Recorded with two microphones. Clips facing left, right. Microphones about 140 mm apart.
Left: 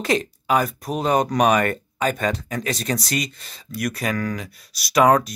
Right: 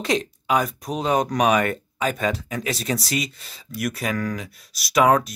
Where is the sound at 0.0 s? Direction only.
Centre (ahead or behind).